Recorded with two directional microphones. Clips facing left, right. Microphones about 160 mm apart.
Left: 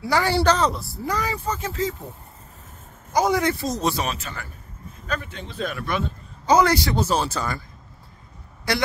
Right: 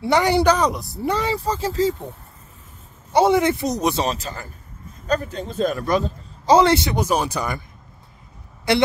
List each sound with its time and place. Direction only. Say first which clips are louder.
0.0 s speech: right 4 dB; 20° right (ahead or behind)
1.0 s a man's voice: right 4 dB; 25° right (ahead or behind)
3.1 s speech: right 4 dB; 25° right (ahead or behind)
4.0 s a man's voice: right 4 dB; 35° right (ahead or behind); by 7.6 s 15° right (ahead or behind)
8.7 s speech: right 6 dB; 25° right (ahead or behind)